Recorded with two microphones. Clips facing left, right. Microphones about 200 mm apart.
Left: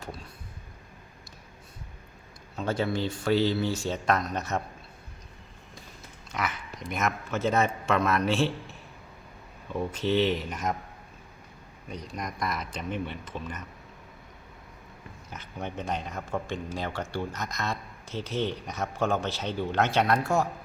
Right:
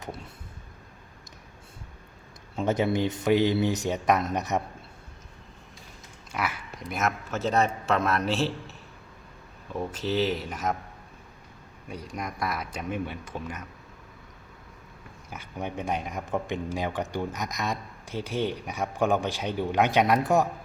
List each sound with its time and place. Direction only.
0.0 s vehicle: 20° right (ahead or behind)
2.6 s speech: 20° right (ahead or behind)
6.3 s a sound: 5° right (ahead or behind)
6.9 s a man's voice: centre (ahead or behind)
9.9 s a man's voice: 5° right (ahead or behind)
11.9 s a man's voice: 10° right (ahead or behind)
15.3 s a man's voice: 10° right (ahead or behind)